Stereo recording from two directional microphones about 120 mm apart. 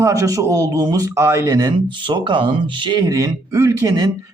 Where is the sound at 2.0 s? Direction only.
40° right (ahead or behind).